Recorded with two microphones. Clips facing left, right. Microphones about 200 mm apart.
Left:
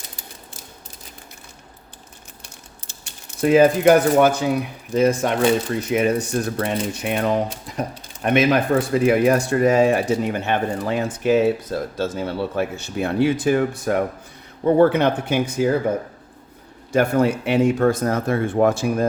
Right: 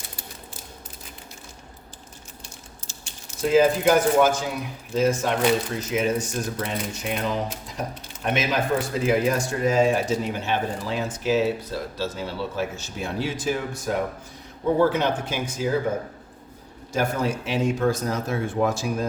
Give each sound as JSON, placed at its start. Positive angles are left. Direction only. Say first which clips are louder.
{"t": 2.8, "sound": "speech", "louder": "even", "side_deg": 60}
{"t": 16.9, "sound": "speech", "louder": "left 7 dB", "side_deg": 60}